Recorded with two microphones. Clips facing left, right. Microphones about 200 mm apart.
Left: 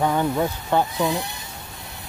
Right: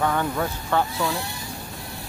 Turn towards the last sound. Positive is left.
turn(degrees=20)  # may be behind; listen again after turning